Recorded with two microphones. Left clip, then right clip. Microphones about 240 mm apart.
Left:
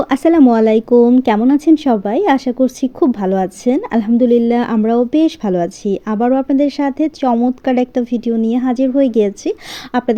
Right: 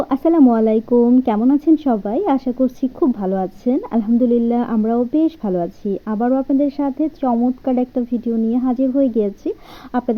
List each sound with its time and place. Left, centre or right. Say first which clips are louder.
0.0 s speech: left 3 dB; left